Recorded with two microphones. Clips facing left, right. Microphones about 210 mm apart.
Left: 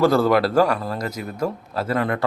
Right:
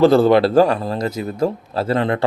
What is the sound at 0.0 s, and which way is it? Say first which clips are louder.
Speech: right 5 dB; 25° right (ahead or behind).